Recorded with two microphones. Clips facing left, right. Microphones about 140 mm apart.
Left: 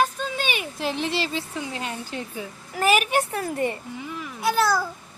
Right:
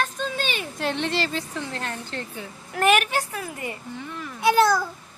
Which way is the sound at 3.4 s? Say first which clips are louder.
Left 7 dB; 35° left (ahead or behind).